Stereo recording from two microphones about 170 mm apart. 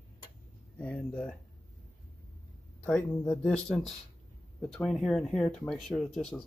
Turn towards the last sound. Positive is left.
turn(degrees=5)  # may be behind; listen again after turning